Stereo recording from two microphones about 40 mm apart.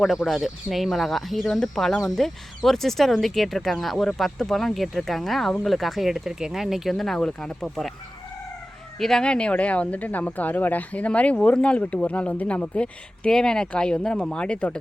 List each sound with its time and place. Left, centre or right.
0.0 s speech: centre
6.9 s speech: centre
9.0 s speech: centre
9.2 s speech: left
12.6 s speech: left